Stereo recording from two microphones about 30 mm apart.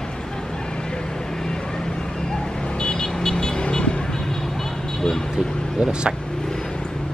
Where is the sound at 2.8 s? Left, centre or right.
Left.